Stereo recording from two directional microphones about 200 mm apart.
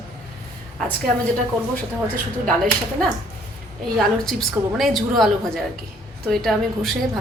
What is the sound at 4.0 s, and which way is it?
A woman's voice, centre (ahead or behind).